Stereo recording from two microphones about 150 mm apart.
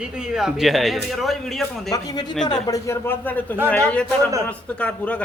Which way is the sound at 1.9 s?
25° left (ahead or behind).